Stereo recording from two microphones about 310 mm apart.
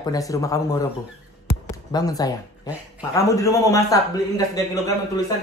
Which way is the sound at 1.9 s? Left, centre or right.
Centre.